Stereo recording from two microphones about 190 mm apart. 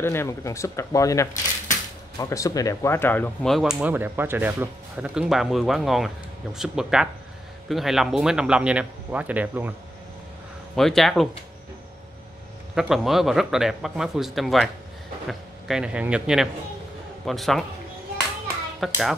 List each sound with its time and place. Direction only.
0.0 s speech: 15° left (ahead or behind); by 9.8 s 10° right (ahead or behind)
10.8 s speech: centre (ahead or behind)
12.7 s speech: centre (ahead or behind)
18.8 s speech: centre (ahead or behind)